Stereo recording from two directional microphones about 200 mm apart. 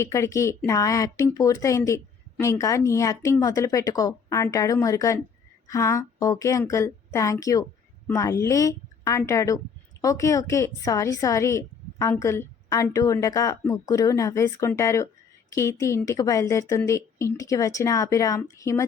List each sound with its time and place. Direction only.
0.0 s a woman's voice: 15° left (ahead or behind)